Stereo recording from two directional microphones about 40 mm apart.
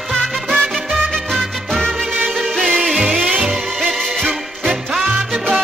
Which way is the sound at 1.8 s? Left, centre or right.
Centre.